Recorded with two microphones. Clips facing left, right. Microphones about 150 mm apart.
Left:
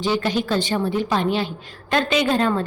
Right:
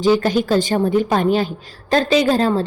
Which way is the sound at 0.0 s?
40° right (ahead or behind).